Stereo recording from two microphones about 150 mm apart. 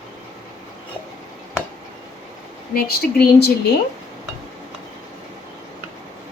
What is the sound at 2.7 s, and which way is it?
Speech, 85° left.